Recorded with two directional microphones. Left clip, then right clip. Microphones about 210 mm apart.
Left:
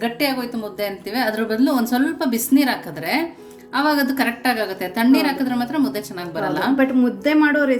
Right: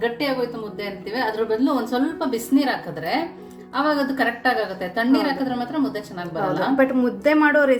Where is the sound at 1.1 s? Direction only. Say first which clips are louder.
Even; 60° left (ahead or behind).